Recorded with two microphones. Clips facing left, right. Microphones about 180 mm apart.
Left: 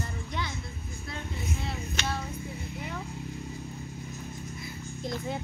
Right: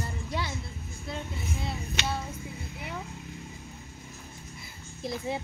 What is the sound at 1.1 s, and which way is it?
Speech, centre (ahead or behind).